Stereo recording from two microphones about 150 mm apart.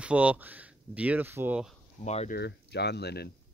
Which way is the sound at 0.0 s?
10° right (ahead or behind).